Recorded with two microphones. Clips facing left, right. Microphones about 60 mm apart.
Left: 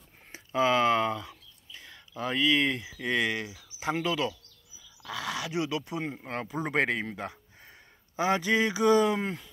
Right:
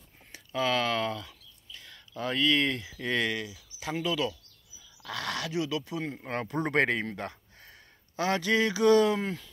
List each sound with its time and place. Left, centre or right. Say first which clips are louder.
0.3 s speech: left 3 dB; left
3.3 s speech: left 1 dB; left
5.0 s speech: even; centre
5.5 s speech: even; left
6.1 s speech: right 2 dB; centre
7.6 s speech: right 2 dB; left